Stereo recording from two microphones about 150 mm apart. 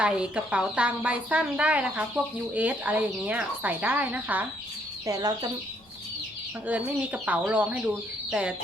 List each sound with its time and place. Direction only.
0.0 s speech: 10° right (ahead or behind)
5.0 s speech: 25° right (ahead or behind)
6.7 s speech: 10° right (ahead or behind)